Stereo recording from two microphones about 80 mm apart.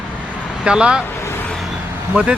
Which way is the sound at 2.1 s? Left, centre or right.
Centre.